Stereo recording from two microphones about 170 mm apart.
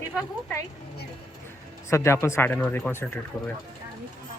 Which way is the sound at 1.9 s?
15° left (ahead or behind).